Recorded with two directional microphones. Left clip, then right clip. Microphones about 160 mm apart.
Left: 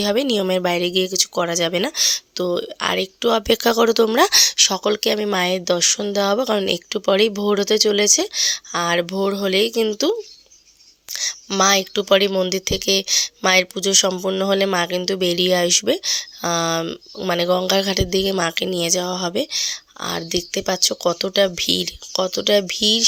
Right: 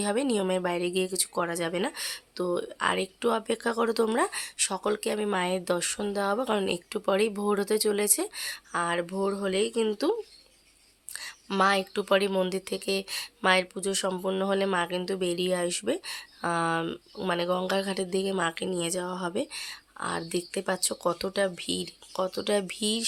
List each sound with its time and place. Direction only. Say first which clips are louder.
0.0 s speech: left 9 dB; 40° left (ahead or behind)
4.2 s speech: left 15 dB; 65° left (ahead or behind); by 17.2 s 30° left (ahead or behind)
17.2 s speech: left 9 dB; 40° left (ahead or behind)